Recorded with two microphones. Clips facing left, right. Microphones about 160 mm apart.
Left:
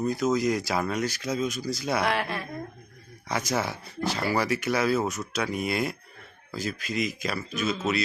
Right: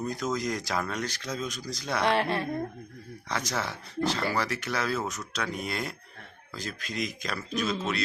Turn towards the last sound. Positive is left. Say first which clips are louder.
# left 2 dB
turn(degrees=5)  # may be behind; listen again after turning